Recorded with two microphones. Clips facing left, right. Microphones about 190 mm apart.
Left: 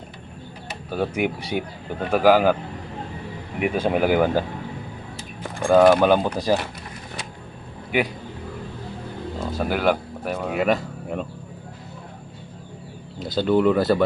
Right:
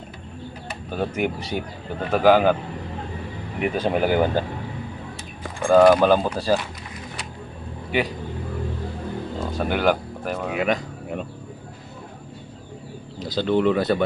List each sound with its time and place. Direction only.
0.9 s speech: 10° left (ahead or behind)
3.6 s speech: 5° left (ahead or behind)
5.6 s speech: centre (ahead or behind)
6.1 s speech: 15° left (ahead or behind)
9.5 s speech: 5° left (ahead or behind)
13.1 s speech: centre (ahead or behind)